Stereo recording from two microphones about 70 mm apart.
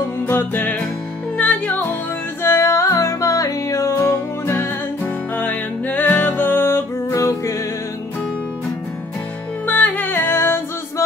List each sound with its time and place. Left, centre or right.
0.3 s music: left
2.4 s music: left
4.5 s music: left
9.7 s music: left